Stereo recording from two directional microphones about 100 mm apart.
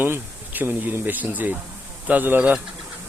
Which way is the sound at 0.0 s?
20° right (ahead or behind).